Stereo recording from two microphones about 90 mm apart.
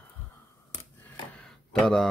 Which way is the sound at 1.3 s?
10° left (ahead or behind).